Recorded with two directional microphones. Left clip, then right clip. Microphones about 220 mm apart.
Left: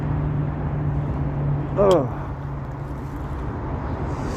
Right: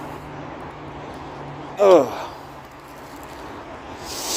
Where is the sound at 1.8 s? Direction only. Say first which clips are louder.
Right 5 dB; 60° right (ahead or behind).